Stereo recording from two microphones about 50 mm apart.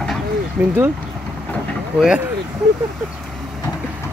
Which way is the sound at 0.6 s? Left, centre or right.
Right.